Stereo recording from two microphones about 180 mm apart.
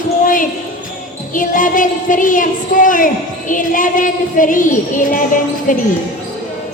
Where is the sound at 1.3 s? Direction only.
45° left (ahead or behind).